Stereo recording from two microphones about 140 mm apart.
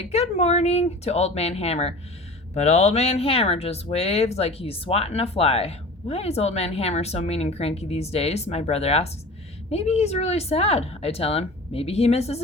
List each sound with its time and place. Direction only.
0.0 s speech: 50° left (ahead or behind)